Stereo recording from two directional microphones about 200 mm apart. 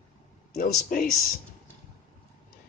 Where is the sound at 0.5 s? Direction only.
45° left (ahead or behind).